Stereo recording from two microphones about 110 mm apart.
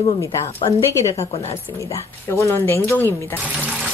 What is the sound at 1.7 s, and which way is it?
Speech, 30° left (ahead or behind).